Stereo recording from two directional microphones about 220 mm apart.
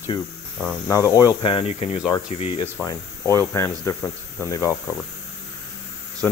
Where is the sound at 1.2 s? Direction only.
20° left (ahead or behind).